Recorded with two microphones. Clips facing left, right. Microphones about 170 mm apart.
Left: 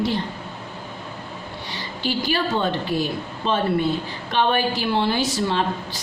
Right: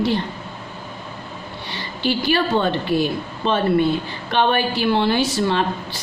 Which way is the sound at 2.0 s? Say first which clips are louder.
Right 4 dB; 65° right (ahead or behind).